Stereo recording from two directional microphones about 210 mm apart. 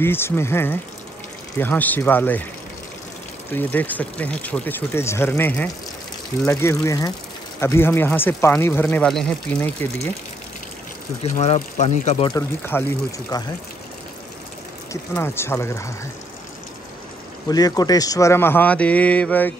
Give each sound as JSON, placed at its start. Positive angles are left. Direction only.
{"t": 0.0, "sound": "speech", "side_deg": 10}
{"t": 3.5, "sound": "speech", "side_deg": 10}
{"t": 11.3, "sound": "speech", "side_deg": 30}
{"t": 12.4, "sound": "speech", "side_deg": 10}
{"t": 14.9, "sound": "speech", "side_deg": 10}
{"t": 17.5, "sound": "speech", "side_deg": 20}